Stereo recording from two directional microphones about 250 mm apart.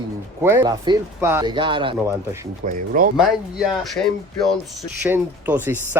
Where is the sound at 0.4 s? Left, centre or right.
Centre.